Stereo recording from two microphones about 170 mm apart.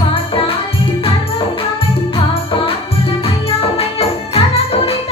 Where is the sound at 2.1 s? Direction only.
30° left (ahead or behind).